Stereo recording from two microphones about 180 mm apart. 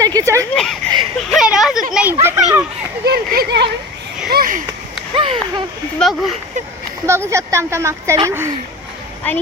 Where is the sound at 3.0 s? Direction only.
60° right (ahead or behind).